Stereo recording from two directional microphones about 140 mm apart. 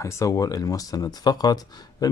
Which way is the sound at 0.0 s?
20° left (ahead or behind).